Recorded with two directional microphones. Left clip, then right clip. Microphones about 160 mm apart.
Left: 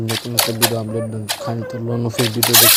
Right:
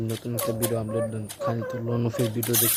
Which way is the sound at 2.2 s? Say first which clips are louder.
Left 16 dB; 45° left (ahead or behind).